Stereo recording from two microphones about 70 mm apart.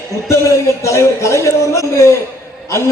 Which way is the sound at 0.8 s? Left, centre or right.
Left.